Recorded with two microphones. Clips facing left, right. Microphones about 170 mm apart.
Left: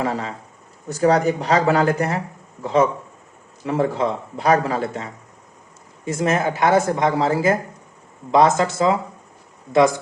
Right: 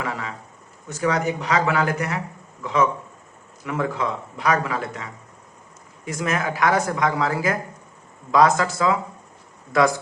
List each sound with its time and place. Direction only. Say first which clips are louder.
0.0 s speech: left 5 dB; 35° left (ahead or behind)
6.1 s speech: left 5 dB; 25° left (ahead or behind)